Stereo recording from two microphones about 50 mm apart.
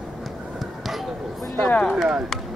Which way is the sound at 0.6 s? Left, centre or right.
Centre.